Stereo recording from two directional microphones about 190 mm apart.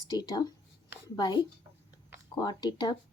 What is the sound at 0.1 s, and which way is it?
Speech, 20° left (ahead or behind).